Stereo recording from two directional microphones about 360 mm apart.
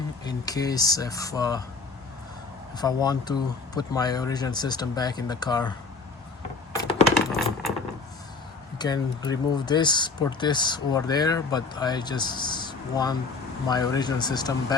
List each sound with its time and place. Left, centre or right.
0.3 s speech: centre
2.7 s speech: centre
7.3 s coin: centre
8.8 s speech: centre